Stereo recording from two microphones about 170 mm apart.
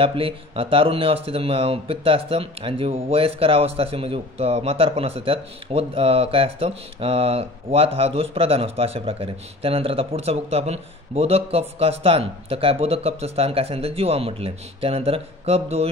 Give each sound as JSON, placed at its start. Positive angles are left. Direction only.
{"t": 0.0, "sound": "speech", "side_deg": -30}